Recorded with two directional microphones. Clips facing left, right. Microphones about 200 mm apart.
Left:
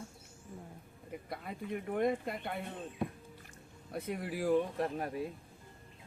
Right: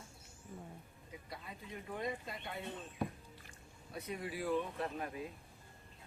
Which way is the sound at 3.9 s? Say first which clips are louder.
Left 5 dB; 50° left (ahead or behind).